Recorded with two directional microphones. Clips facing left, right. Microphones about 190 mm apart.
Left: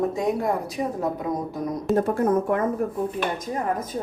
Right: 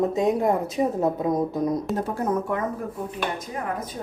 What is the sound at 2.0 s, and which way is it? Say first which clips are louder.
Speech: left 4 dB; 55° left (ahead or behind).